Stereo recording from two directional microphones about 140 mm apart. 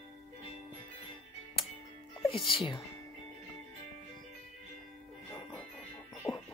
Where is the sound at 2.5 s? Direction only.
40° left (ahead or behind).